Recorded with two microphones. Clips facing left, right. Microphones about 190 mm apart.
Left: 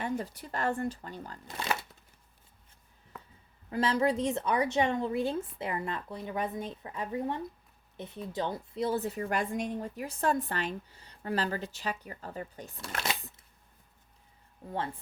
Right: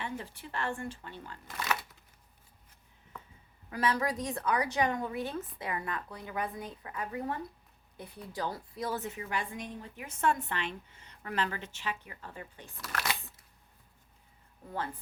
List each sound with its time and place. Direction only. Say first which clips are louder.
0.0 s a woman's voice: left 6 dB; 40° left (ahead or behind)
1.5 s speech: left 1 dB; 25° left (ahead or behind)
3.7 s a woman's voice: left 4 dB; 25° left (ahead or behind)
12.7 s a woman's voice: left 1 dB; 25° left (ahead or behind)